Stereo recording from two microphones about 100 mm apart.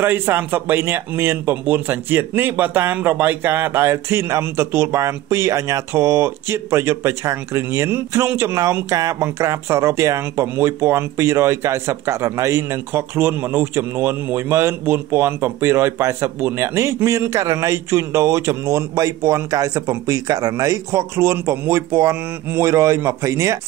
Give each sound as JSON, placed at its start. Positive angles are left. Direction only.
{"t": 0.0, "sound": "speech", "side_deg": -20}